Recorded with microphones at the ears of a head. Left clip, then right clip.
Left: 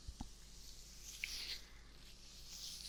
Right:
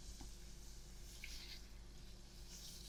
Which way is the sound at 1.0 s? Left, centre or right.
Left.